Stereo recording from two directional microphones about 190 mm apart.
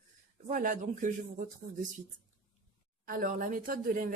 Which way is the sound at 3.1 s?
45° right (ahead or behind).